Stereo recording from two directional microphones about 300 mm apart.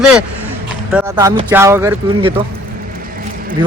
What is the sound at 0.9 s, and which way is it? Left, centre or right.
Speech, centre.